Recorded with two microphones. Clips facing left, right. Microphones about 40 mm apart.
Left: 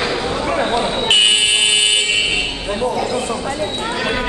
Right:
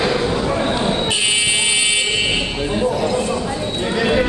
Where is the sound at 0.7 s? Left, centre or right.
Centre.